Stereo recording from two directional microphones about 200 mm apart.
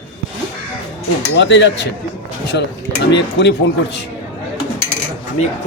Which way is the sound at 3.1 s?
60° left (ahead or behind).